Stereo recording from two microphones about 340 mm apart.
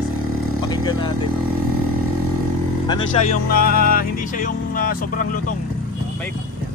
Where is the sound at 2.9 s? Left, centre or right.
Left.